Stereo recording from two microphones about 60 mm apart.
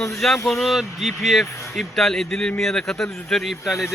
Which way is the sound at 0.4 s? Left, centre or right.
Centre.